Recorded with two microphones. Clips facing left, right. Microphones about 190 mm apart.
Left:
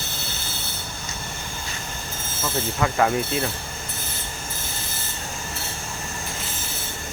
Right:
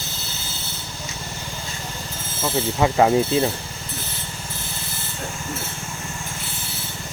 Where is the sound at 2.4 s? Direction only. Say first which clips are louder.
Right 4 dB; 25° right (ahead or behind).